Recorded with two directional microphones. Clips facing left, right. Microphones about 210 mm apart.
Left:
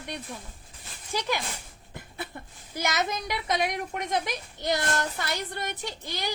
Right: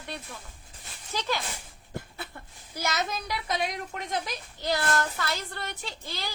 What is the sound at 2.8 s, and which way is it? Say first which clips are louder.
A woman's voice: left 2 dB; 20° left (ahead or behind).